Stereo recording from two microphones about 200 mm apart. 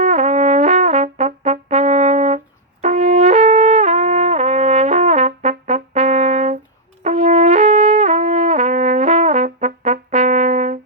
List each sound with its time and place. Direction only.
0.0 s brass instrument: 35° right (ahead or behind)